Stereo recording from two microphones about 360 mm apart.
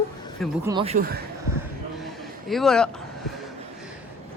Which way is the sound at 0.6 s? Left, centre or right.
Centre.